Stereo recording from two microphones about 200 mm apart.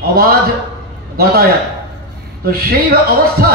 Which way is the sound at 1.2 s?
50° right (ahead or behind).